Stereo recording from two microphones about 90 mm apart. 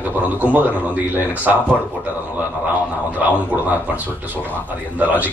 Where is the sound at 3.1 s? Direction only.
15° right (ahead or behind).